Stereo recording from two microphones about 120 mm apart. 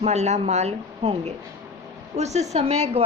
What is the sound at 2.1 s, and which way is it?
Speech, 65° right (ahead or behind).